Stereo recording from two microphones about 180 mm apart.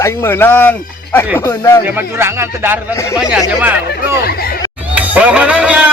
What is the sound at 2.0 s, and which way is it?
A man's voice, 15° right (ahead or behind).